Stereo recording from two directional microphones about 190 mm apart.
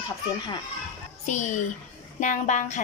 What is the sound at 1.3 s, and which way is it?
A woman's voice, 40° left (ahead or behind).